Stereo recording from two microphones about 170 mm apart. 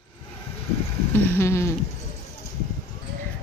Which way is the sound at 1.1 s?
15° left (ahead or behind).